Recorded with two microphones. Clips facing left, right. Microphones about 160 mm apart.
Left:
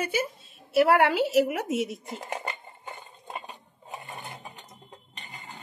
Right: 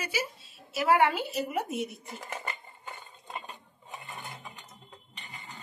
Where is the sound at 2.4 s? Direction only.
25° left (ahead or behind).